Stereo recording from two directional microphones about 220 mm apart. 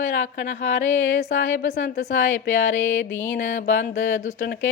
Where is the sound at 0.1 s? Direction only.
55° left (ahead or behind).